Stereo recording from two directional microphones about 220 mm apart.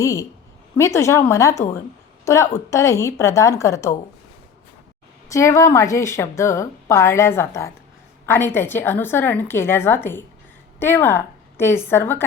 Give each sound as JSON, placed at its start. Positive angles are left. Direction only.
{"t": 0.0, "sound": "a woman's voice", "side_deg": 15}
{"t": 5.3, "sound": "a woman's voice", "side_deg": 15}